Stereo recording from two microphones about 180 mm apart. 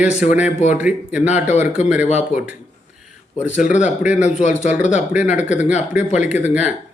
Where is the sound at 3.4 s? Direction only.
5° right (ahead or behind).